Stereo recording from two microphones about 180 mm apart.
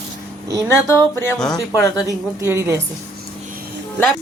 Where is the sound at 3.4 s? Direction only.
50° right (ahead or behind).